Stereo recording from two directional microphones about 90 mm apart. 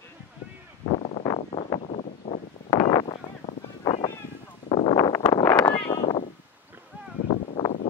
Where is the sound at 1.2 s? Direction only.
60° left (ahead or behind).